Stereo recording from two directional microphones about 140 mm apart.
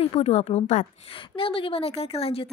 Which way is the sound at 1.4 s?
40° left (ahead or behind).